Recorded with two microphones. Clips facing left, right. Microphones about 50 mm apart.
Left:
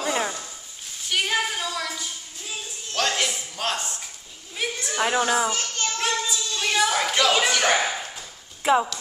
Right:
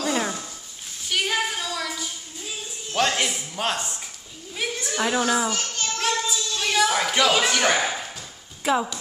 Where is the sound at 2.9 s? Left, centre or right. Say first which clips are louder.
Right 2 dB; centre.